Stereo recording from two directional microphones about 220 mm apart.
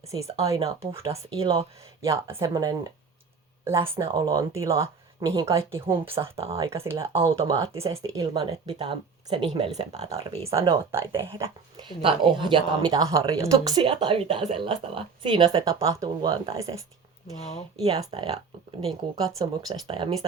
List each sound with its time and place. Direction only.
0.3 s speech: 25° right (ahead or behind)
4.1 s speech: 15° right (ahead or behind)
6.1 s speech: 25° right (ahead or behind)
6.6 s speech: 15° right (ahead or behind)
17.7 s speech: 25° right (ahead or behind)